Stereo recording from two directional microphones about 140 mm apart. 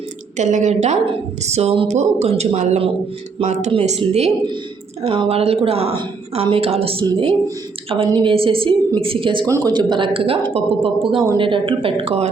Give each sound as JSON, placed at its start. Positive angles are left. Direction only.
{"t": 0.3, "sound": "a woman's voice", "side_deg": -60}